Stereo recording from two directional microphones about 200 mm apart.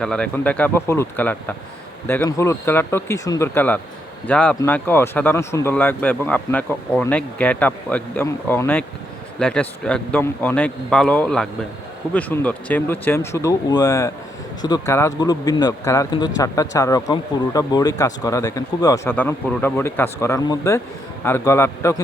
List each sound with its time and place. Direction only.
0.0 s a man's voice: 5° left (ahead or behind)